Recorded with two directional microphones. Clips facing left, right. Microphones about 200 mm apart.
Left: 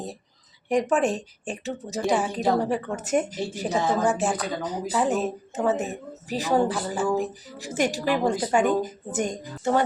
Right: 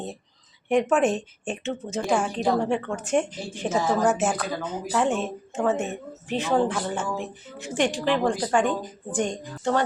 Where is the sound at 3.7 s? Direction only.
15° left (ahead or behind).